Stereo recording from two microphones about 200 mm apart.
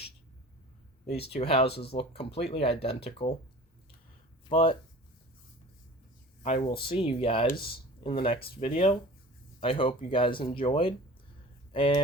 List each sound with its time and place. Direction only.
1.0 s speech: 30° left (ahead or behind)
4.4 s speech: 25° left (ahead or behind)
6.4 s speech: 35° left (ahead or behind)
7.4 s speech: 50° left (ahead or behind)
8.7 s speech: 30° left (ahead or behind)